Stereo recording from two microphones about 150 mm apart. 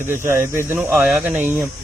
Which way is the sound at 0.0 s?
15° right (ahead or behind).